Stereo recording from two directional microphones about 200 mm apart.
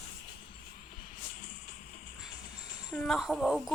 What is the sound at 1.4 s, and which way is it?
Music, 45° left (ahead or behind).